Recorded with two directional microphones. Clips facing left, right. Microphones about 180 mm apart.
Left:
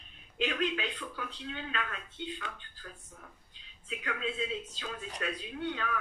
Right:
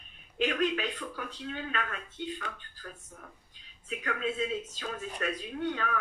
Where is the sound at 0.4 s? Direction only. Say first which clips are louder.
Right 3 dB; 45° right (ahead or behind).